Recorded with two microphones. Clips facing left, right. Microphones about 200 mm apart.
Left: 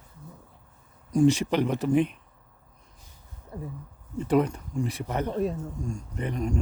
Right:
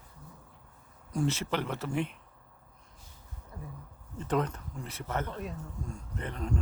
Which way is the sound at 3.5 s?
30° left (ahead or behind).